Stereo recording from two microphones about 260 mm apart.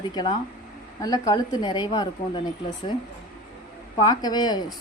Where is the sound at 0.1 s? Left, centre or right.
Centre.